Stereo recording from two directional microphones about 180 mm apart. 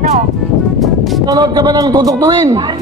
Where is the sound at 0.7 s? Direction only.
Centre (ahead or behind).